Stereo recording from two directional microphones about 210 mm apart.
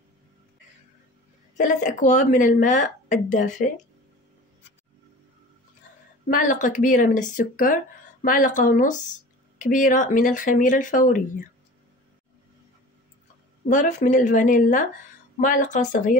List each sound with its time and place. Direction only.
1.6 s speech: 35° left (ahead or behind)
6.2 s speech: 40° left (ahead or behind)
13.7 s speech: 35° left (ahead or behind)